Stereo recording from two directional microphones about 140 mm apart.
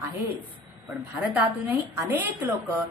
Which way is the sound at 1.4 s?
15° right (ahead or behind).